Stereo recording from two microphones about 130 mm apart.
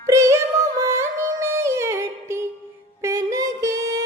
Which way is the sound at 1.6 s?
20° right (ahead or behind).